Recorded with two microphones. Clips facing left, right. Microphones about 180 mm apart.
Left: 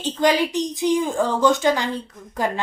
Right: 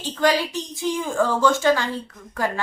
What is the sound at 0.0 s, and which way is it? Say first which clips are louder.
A woman's voice: left 2 dB; 20° left (ahead or behind).